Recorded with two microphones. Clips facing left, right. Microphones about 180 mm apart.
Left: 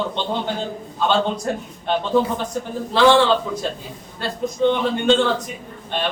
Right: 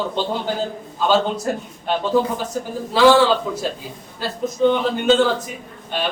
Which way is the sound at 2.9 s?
5° right (ahead or behind).